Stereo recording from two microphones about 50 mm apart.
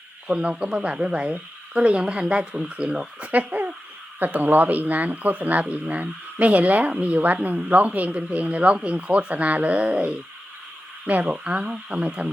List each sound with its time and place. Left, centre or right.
0.3 s speech: right
3.3 s speech: right